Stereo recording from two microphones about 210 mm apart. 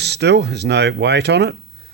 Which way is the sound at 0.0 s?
50° right (ahead or behind).